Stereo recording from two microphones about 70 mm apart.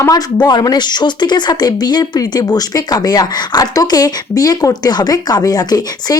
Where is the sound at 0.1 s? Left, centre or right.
Left.